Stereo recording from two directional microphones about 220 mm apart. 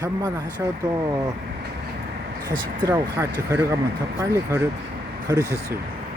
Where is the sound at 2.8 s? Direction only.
15° right (ahead or behind).